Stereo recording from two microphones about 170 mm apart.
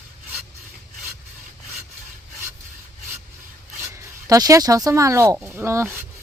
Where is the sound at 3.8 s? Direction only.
20° right (ahead or behind).